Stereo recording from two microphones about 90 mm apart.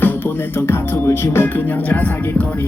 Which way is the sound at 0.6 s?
30° left (ahead or behind).